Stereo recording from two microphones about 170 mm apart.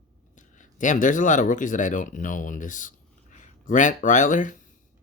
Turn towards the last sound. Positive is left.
turn(degrees=50)  # may be behind; listen again after turning